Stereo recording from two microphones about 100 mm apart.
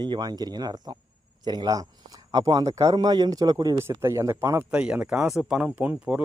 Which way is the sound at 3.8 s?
25° right (ahead or behind).